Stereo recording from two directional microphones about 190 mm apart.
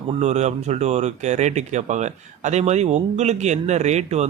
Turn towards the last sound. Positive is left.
turn(degrees=-35)  # may be behind; listen again after turning